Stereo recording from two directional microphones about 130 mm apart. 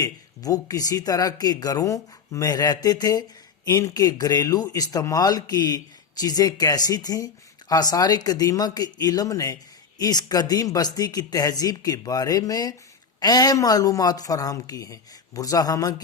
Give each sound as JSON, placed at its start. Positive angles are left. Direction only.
{"t": 0.0, "sound": "speech", "side_deg": 30}